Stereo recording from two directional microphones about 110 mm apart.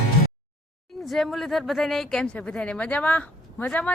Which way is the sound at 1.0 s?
Centre (ahead or behind).